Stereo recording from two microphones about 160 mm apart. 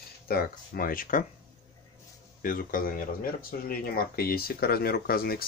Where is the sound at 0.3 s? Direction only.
65° left (ahead or behind).